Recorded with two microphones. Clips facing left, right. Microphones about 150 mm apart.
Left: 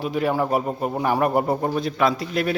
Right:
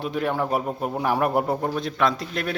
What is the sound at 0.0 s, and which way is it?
A man's voice, 5° left (ahead or behind).